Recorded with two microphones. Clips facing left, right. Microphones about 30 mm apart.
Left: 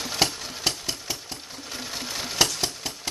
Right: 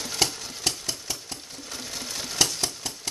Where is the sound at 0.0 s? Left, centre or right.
Centre.